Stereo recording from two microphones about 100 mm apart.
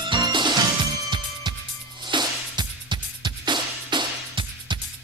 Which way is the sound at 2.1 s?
50° right (ahead or behind).